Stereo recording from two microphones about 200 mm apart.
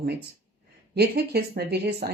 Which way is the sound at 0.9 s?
55° right (ahead or behind).